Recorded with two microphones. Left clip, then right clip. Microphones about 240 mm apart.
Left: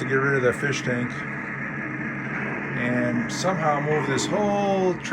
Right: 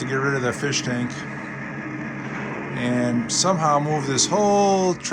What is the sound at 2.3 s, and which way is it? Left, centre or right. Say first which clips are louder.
Music: left 2 dB; right.